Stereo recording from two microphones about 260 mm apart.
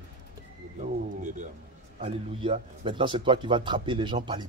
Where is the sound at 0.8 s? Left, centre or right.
Right.